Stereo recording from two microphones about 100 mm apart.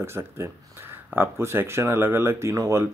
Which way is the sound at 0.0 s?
25° right (ahead or behind).